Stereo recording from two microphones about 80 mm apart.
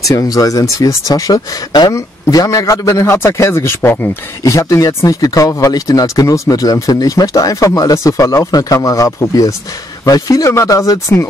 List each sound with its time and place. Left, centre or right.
0.1 s speech: left
2.0 s speech: left
2.9 s speech: left
4.4 s speech: left